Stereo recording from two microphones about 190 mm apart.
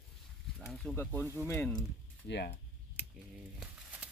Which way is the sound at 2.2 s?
65° left (ahead or behind).